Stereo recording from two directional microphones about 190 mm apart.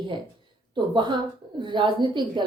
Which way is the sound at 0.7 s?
25° right (ahead or behind).